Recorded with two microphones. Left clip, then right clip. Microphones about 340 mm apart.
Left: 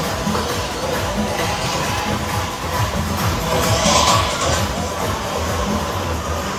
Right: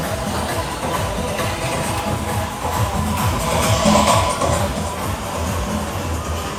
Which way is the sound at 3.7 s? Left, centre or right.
Right.